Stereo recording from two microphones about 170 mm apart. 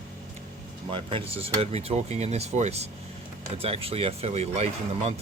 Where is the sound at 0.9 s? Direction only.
30° right (ahead or behind).